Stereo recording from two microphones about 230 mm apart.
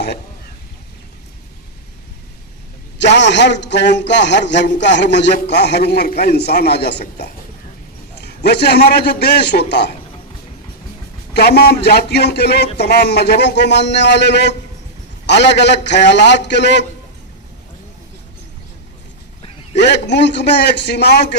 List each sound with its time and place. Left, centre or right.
3.0 s a man's voice: left
11.3 s a man's voice: left
19.7 s a man's voice: left